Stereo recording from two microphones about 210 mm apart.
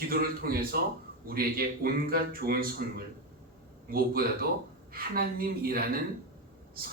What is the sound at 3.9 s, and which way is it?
Speech, 45° right (ahead or behind).